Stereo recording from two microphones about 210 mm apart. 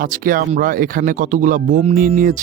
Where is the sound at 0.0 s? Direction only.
40° right (ahead or behind).